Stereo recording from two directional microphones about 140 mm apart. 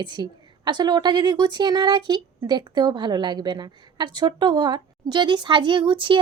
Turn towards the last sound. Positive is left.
turn(degrees=-35)  # may be behind; listen again after turning